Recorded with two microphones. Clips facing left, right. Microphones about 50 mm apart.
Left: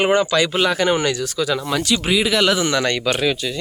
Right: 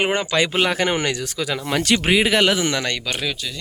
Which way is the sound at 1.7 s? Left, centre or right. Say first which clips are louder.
Even; right.